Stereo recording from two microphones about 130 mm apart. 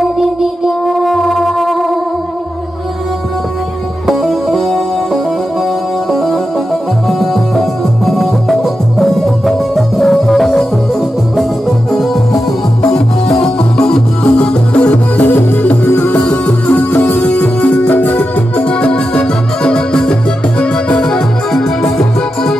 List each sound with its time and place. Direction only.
0.0 s music: 5° right (ahead or behind)
4.1 s music: centre (ahead or behind)
13.4 s music: 5° left (ahead or behind)